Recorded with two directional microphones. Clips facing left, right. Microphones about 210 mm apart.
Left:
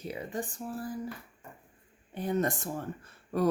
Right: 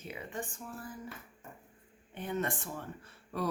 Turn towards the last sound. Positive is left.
turn(degrees=45)  # may be behind; listen again after turning